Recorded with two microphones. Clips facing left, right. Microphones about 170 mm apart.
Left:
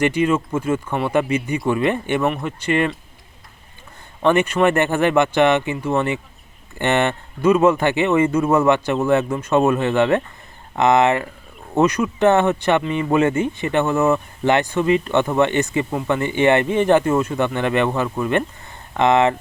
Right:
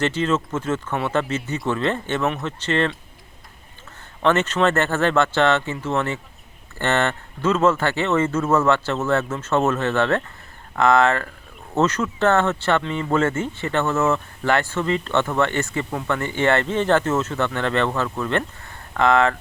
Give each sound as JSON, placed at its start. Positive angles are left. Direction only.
{"t": 0.0, "sound": "speech", "side_deg": 10}
{"t": 4.2, "sound": "speech", "side_deg": 15}